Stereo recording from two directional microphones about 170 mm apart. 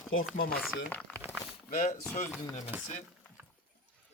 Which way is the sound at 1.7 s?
45° left (ahead or behind).